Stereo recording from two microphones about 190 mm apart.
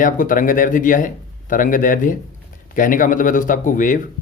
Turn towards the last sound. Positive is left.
turn(degrees=45)  # may be behind; listen again after turning